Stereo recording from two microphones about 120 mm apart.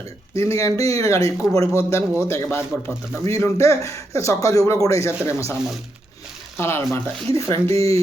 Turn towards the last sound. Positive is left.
turn(degrees=25)  # may be behind; listen again after turning